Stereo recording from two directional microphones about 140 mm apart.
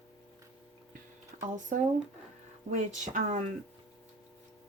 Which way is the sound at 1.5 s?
60° right (ahead or behind).